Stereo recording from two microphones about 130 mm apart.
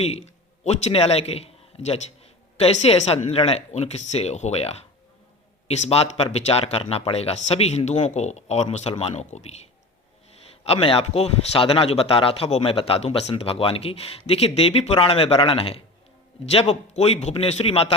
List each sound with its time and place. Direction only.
0.0 s a man's voice: 55° left (ahead or behind)
10.7 s speech: 45° left (ahead or behind)